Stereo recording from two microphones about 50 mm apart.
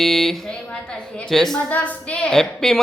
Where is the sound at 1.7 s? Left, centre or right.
Left.